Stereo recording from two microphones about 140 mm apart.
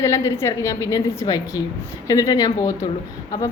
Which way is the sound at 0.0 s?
20° left (ahead or behind).